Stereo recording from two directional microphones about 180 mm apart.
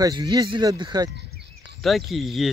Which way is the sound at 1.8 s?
Centre (ahead or behind).